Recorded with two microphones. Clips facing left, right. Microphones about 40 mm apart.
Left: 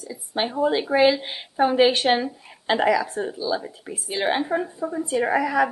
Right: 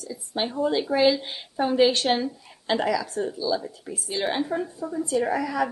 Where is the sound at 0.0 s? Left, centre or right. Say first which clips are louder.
Left 2 dB; centre.